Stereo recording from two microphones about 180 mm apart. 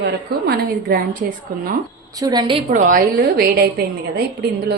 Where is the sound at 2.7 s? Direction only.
45° right (ahead or behind).